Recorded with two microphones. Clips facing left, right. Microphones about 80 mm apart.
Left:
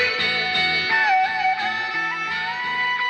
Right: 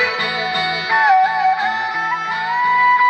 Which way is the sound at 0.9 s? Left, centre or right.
Right.